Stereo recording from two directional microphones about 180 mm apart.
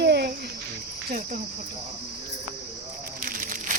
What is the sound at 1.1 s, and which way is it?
Cricket, 50° right (ahead or behind).